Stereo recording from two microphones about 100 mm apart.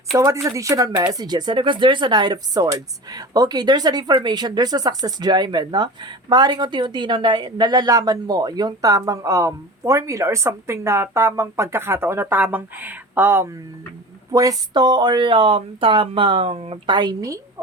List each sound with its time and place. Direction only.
0.4 s speech: 30° right (ahead or behind)
14.3 s speech: 40° right (ahead or behind); by 16.7 s 70° right (ahead or behind)
16.8 s a woman's voice: 45° right (ahead or behind)